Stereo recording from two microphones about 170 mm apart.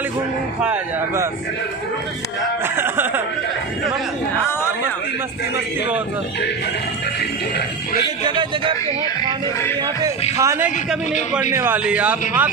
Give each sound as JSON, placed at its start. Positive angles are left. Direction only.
{"t": 2.6, "sound": "speech", "side_deg": -15}
{"t": 8.3, "sound": "speech", "side_deg": -30}
{"t": 10.3, "sound": "speech", "side_deg": -15}